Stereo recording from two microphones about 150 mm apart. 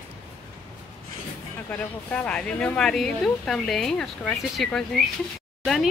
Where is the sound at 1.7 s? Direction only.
10° left (ahead or behind).